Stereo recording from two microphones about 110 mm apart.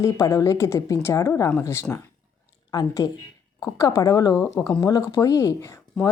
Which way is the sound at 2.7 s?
35° left (ahead or behind).